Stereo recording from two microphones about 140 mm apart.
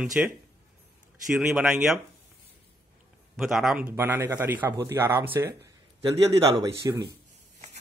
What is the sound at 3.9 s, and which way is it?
Speech, 15° right (ahead or behind).